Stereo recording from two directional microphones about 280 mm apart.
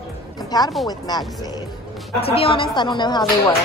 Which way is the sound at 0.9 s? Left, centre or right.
Centre.